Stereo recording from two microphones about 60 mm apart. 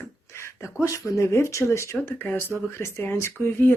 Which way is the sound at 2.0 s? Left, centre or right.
Left.